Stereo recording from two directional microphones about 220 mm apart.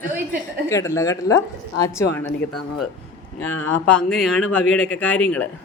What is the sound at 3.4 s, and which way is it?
Speech, 65° left (ahead or behind).